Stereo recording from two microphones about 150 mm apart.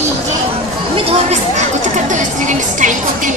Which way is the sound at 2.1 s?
55° right (ahead or behind).